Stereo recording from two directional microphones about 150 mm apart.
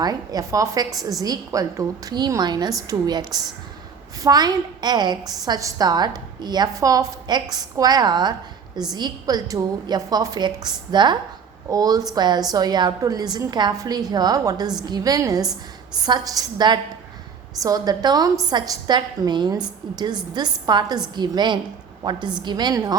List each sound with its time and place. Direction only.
0.0 s a woman's voice: 25° right (ahead or behind)